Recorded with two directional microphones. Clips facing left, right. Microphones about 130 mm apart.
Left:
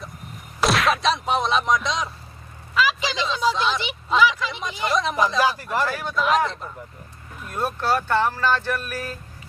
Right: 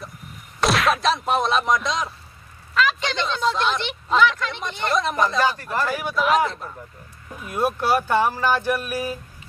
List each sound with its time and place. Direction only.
0.6 s speech: centre (ahead or behind)
5.9 s speech: 5° right (ahead or behind)